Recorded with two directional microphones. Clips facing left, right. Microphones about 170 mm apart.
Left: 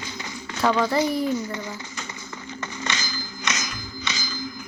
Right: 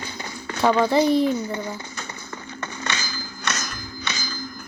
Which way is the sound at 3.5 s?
10° left (ahead or behind).